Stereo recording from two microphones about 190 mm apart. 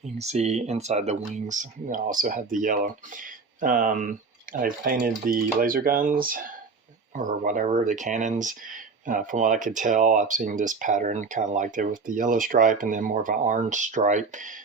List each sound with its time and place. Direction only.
0.2 s speech: 35° right (ahead or behind)